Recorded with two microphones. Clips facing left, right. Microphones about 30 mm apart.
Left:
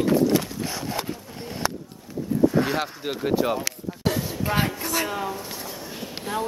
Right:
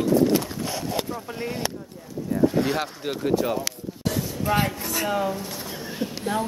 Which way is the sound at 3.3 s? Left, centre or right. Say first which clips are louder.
Left 1 dB; centre.